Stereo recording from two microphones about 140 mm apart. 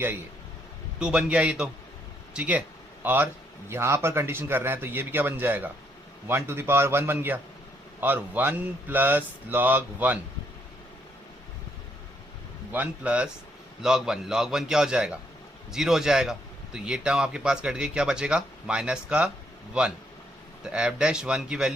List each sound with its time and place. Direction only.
0.9 s a man's voice: 5° right (ahead or behind)
2.3 s a sound: 10° right (ahead or behind)
3.7 s a man's voice: 20° right (ahead or behind)
12.7 s a man's voice: 10° right (ahead or behind)